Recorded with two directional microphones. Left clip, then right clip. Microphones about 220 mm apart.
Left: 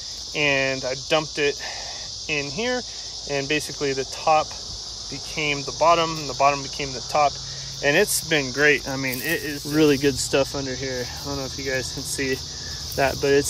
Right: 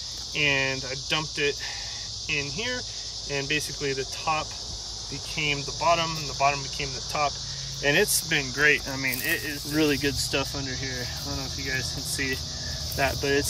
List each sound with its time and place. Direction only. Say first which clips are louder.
0.4 s speech: left 3 dB; 10° right (ahead or behind)
13.2 s speech: left 6 dB; 50° right (ahead or behind)